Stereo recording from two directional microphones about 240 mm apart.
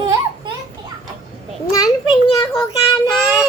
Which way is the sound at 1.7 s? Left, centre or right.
Centre.